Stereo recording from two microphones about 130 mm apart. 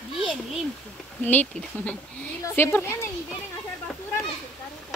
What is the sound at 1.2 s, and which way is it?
Speech, 10° left (ahead or behind).